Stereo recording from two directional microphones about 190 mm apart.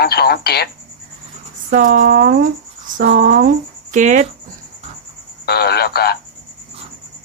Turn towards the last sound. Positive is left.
turn(degrees=55)  # may be behind; listen again after turning